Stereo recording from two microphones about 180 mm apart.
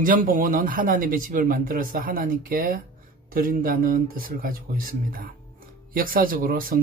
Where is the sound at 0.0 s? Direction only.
50° right (ahead or behind).